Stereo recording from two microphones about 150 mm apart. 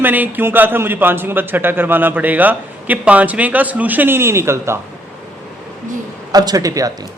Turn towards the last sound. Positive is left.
turn(degrees=-25)  # may be behind; listen again after turning